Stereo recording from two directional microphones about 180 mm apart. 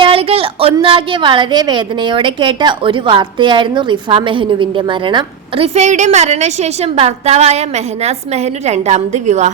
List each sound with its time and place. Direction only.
0.0 s a woman's voice: 30° right (ahead or behind)